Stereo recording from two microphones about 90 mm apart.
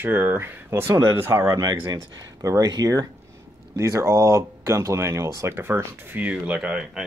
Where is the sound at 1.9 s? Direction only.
50° right (ahead or behind).